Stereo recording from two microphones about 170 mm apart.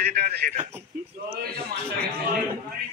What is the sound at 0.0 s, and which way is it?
Speech, 60° right (ahead or behind).